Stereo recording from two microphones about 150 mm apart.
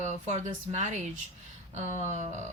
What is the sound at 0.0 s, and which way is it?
Speech, 50° right (ahead or behind).